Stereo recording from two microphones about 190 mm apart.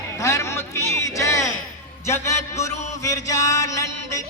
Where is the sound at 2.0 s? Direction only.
15° left (ahead or behind).